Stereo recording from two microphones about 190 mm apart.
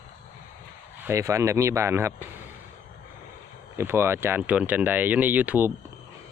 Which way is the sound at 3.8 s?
10° right (ahead or behind).